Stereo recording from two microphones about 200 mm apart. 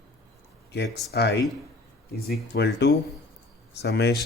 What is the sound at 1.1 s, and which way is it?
Speech, 55° left (ahead or behind).